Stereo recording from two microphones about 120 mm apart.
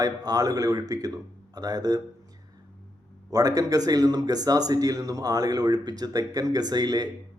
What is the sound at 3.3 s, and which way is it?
Speech, 30° right (ahead or behind).